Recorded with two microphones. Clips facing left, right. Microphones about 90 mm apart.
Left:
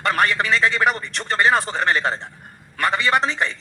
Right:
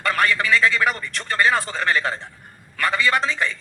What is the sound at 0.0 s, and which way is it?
A man's voice, 20° left (ahead or behind).